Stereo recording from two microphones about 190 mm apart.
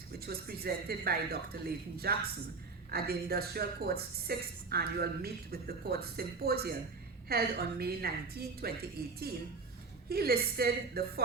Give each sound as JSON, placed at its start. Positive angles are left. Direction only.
{"t": 0.2, "sound": "a woman's voice", "side_deg": -55}